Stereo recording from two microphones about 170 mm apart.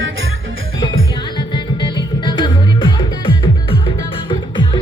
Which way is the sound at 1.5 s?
25° left (ahead or behind).